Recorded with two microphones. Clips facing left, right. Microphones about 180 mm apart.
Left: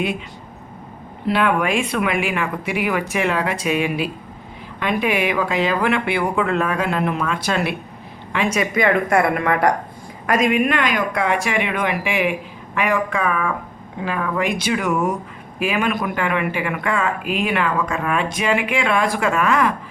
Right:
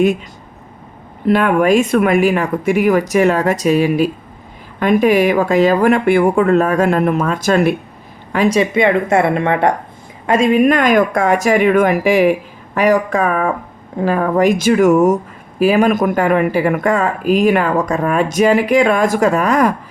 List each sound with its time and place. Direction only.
1.3 s a woman's voice: 45° right (ahead or behind)